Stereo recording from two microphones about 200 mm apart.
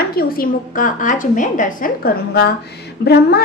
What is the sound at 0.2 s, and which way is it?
A woman's voice, 45° left (ahead or behind).